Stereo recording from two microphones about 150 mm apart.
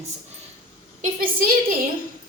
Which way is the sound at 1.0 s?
75° right (ahead or behind).